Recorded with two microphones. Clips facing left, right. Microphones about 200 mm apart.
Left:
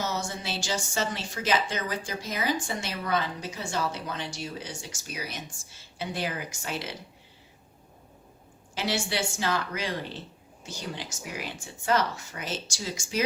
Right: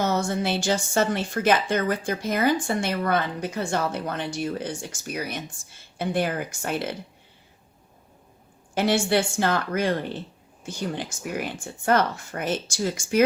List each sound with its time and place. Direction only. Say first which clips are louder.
0.0 s a woman's voice: right 8 dB; 55° right (ahead or behind)
8.7 s a woman's voice: right 9 dB; 55° right (ahead or behind)